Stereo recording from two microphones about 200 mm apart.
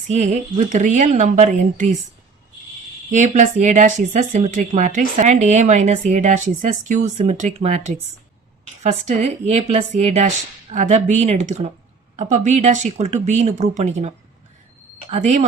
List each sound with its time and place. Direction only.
0.1 s speech: 35° right (ahead or behind)
3.1 s speech: 35° right (ahead or behind)
15.1 s speech: 35° right (ahead or behind)